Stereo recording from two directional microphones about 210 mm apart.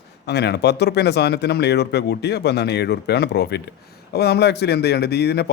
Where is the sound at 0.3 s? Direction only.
50° left (ahead or behind).